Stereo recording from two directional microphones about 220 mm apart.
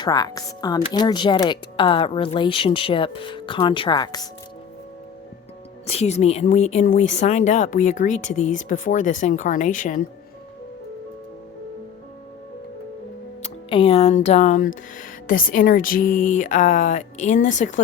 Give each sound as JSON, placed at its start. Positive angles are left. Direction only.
{"t": 0.0, "sound": "speech", "side_deg": 15}
{"t": 5.8, "sound": "speech", "side_deg": 30}
{"t": 13.4, "sound": "speech", "side_deg": 25}